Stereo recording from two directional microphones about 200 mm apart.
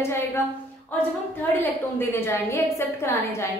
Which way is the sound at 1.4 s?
10° left (ahead or behind).